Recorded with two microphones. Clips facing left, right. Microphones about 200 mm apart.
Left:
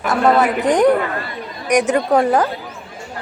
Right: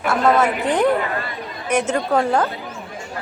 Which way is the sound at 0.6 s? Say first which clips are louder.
Left 4 dB; 15° left (ahead or behind).